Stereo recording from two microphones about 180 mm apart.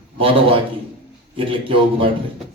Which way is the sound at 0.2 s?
30° right (ahead or behind).